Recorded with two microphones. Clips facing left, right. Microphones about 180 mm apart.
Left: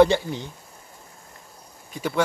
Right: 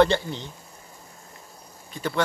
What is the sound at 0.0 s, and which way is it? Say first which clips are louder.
Speech: left 3 dB; 10° left (ahead or behind).